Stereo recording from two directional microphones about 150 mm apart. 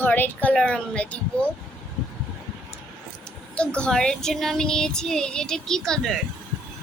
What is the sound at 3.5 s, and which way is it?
Speech, 5° left (ahead or behind).